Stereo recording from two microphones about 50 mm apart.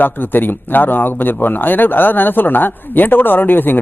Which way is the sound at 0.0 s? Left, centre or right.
Left.